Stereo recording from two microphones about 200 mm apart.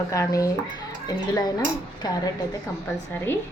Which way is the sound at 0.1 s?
15° left (ahead or behind).